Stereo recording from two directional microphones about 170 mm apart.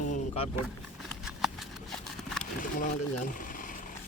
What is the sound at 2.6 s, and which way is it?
Speech, 50° left (ahead or behind).